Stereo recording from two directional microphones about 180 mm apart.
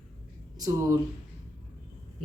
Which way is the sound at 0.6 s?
15° right (ahead or behind).